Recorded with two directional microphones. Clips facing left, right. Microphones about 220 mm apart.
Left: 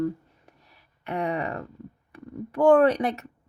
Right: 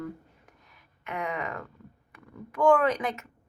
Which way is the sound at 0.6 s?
35° left (ahead or behind).